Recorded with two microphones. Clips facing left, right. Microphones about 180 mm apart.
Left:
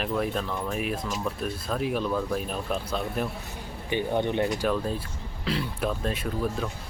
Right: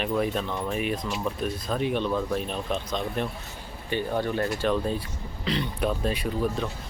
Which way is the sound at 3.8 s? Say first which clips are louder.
Left 1 dB; 15° left (ahead or behind).